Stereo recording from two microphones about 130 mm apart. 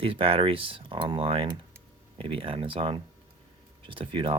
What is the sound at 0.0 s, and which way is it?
Speech, 45° right (ahead or behind).